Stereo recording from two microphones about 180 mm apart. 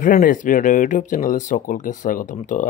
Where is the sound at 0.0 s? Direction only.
50° left (ahead or behind).